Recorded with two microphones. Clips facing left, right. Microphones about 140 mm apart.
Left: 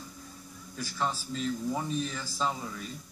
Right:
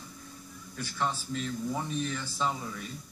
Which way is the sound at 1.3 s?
Centre (ahead or behind).